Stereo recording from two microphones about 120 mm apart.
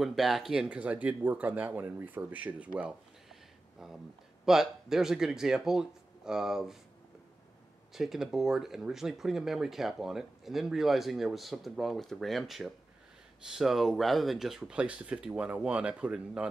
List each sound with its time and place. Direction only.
0.0 s speech: centre (ahead or behind)
3.8 s speech: 5° right (ahead or behind)
7.9 s speech: 5° right (ahead or behind)